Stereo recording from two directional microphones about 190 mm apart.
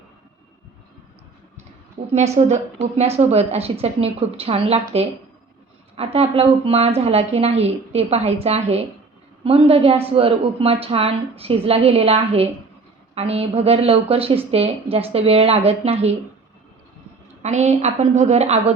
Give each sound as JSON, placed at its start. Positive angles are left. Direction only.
{"t": 2.1, "sound": "a woman's voice", "side_deg": -35}
{"t": 17.4, "sound": "a woman's voice", "side_deg": -35}